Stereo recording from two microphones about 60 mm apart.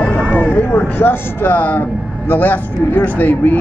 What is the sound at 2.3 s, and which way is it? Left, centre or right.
A man's voice, left.